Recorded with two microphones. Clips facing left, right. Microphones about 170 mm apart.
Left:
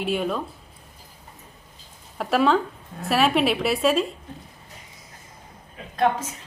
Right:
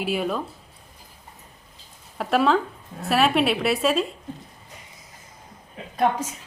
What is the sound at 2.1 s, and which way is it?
A woman's voice, centre (ahead or behind).